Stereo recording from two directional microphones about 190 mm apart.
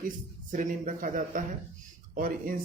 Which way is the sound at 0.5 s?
45° right (ahead or behind).